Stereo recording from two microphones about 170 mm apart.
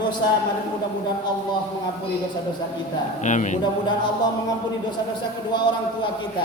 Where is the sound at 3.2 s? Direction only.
45° left (ahead or behind).